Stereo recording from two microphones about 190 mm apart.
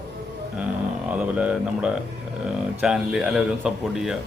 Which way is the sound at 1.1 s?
5° right (ahead or behind).